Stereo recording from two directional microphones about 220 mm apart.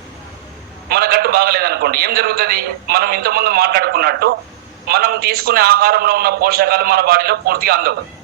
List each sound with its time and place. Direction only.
0.9 s a man's voice: 45° right (ahead or behind)